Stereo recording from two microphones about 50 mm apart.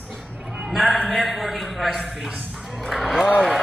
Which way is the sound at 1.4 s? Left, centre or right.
Centre.